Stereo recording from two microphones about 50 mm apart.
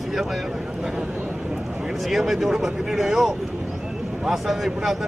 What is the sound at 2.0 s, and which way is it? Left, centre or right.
Speech, centre.